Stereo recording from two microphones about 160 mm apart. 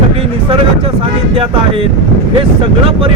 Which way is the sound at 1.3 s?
35° right (ahead or behind).